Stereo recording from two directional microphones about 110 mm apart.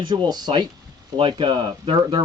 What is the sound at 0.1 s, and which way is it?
Speech, 40° right (ahead or behind).